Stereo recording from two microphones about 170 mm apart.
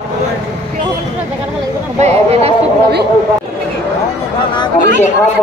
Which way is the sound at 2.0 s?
40° right (ahead or behind).